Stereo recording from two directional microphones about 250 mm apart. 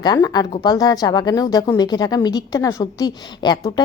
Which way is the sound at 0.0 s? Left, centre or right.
Centre.